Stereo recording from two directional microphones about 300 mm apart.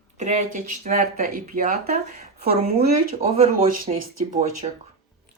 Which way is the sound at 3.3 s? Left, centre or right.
Right.